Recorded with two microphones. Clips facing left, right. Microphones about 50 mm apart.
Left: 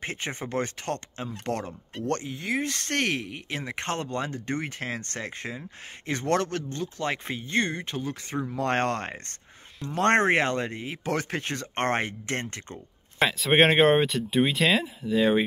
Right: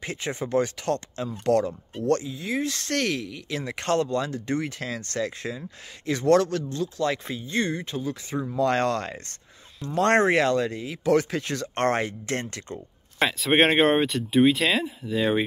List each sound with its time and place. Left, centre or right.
0.0 s speech: left
2.0 s speech: left
3.6 s speech: left
13.2 s speech: centre